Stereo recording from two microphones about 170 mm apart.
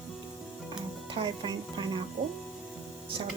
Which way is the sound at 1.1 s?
25° right (ahead or behind).